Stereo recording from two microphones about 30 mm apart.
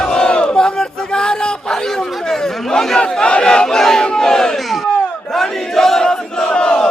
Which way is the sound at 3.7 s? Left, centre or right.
Centre.